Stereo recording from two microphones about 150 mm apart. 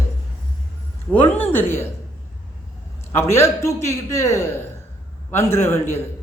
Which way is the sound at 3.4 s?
20° left (ahead or behind).